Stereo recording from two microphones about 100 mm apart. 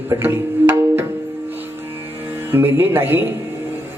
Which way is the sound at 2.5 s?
20° right (ahead or behind).